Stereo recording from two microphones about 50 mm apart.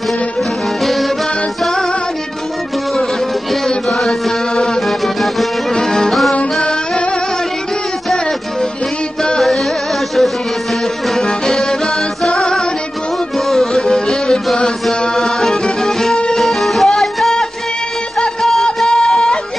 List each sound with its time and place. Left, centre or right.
0.8 s music: centre
3.6 s music: centre
9.4 s music: centre
11.1 s music: centre
16.4 s music: centre